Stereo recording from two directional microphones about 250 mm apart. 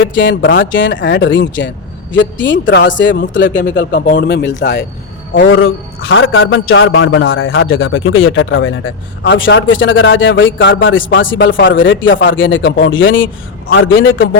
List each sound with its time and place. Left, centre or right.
0.1 s speech: left